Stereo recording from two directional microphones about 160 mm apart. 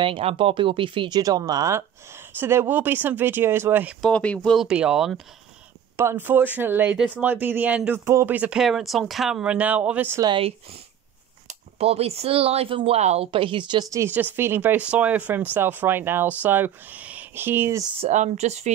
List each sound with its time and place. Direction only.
0.0 s speech: 35° right (ahead or behind); by 3.9 s 15° right (ahead or behind)
4.0 s speech: 5° left (ahead or behind)
5.9 s speech: 15° right (ahead or behind)
10.2 s speech: 35° right (ahead or behind); by 17.8 s 15° right (ahead or behind)
18.0 s speech: 50° right (ahead or behind)